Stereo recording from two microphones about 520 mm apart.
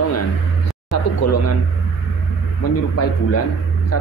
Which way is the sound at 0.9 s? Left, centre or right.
Left.